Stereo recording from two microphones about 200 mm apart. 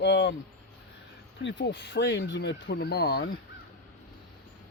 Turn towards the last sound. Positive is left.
turn(degrees=55)  # may be behind; listen again after turning